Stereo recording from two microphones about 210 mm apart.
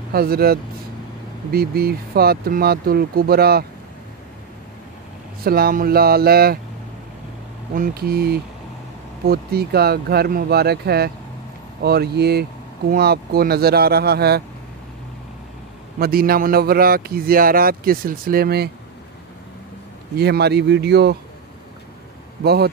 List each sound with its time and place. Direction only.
0.1 s speech: 45° right (ahead or behind)
5.4 s speech: 45° right (ahead or behind)
7.7 s speech: 45° right (ahead or behind)
16.0 s speech: 45° right (ahead or behind)
20.2 s speech: 50° right (ahead or behind)
22.4 s speech: 50° right (ahead or behind)